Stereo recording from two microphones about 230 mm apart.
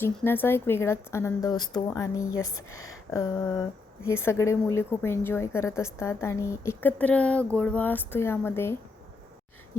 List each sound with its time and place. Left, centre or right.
0.0 s speech: centre
2.6 s speech: left
3.1 s speech: centre